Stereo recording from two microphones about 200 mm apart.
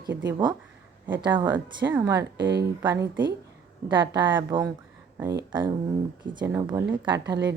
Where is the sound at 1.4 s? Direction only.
20° right (ahead or behind).